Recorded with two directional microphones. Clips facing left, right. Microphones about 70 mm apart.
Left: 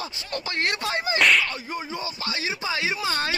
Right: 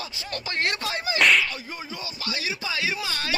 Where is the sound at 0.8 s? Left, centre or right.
Left.